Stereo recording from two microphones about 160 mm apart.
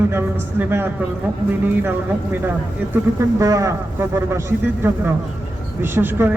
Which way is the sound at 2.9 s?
20° right (ahead or behind).